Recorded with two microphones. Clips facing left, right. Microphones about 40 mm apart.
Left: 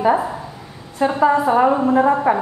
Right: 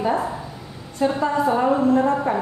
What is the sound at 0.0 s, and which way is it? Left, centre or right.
A woman's voice, centre.